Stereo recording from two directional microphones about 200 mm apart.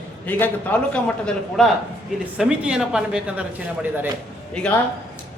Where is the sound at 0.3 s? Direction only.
10° left (ahead or behind).